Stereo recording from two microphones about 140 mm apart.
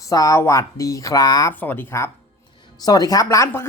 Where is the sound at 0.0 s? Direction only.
25° left (ahead or behind).